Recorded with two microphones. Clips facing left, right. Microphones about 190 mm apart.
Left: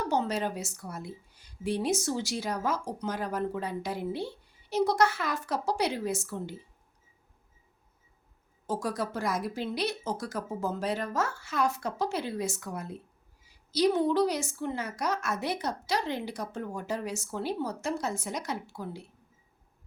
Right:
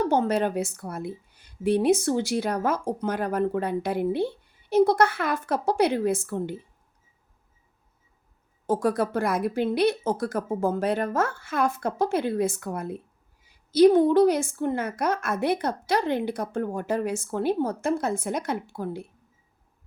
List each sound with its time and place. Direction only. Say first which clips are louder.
0.0 s a woman's voice: right 6 dB; 55° right (ahead or behind)
8.6 s a woman's voice: right 8 dB; 55° right (ahead or behind)